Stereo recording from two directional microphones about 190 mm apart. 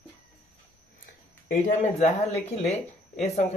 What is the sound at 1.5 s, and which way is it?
Speech, 40° left (ahead or behind).